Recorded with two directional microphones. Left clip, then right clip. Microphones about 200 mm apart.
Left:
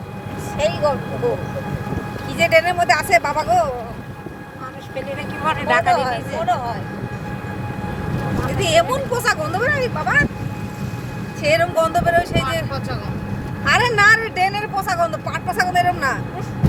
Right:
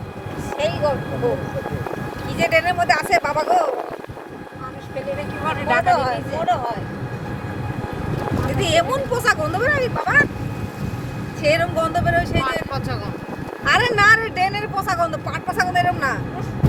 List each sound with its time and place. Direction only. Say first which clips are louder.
2.4 s speech: left 3 dB; 20° left (ahead or behind)
5.5 s speech: left 2 dB; 45° left (ahead or behind)
5.8 s speech: even; centre (ahead or behind)
8.5 s speech: left 2 dB; 10° left (ahead or behind)
11.4 s speech: left 2 dB; 10° left (ahead or behind)
13.7 s speech: left 1 dB; 10° left (ahead or behind)